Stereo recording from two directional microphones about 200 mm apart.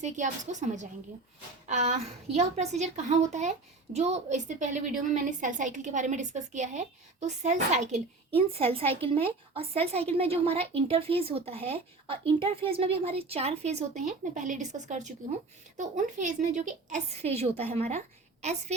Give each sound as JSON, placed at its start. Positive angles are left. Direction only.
{"t": 0.0, "sound": "a woman's voice", "side_deg": -35}